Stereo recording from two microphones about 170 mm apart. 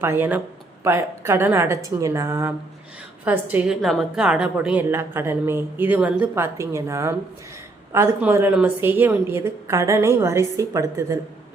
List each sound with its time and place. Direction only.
0.0 s a woman's voice: 15° right (ahead or behind)
8.2 s a woman's voice: 10° right (ahead or behind)